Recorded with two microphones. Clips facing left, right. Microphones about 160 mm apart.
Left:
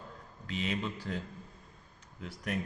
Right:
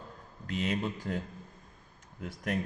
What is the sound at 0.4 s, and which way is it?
Speech, 50° right (ahead or behind).